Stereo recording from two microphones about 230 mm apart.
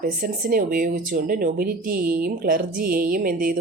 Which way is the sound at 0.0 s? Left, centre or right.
Right.